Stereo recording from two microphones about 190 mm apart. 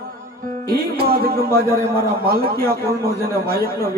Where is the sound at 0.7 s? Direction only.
50° right (ahead or behind).